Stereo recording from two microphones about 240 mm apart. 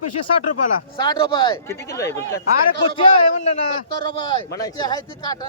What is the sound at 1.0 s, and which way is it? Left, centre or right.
Speech, centre.